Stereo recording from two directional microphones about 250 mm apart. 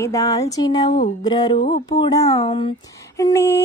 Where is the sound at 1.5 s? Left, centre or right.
Left.